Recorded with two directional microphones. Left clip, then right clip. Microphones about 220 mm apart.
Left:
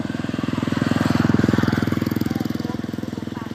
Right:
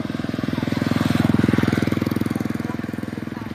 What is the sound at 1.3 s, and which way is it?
Vehicle, 35° right (ahead or behind).